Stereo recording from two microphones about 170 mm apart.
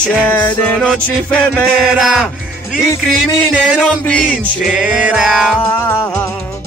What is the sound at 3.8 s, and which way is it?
Music, 5° left (ahead or behind).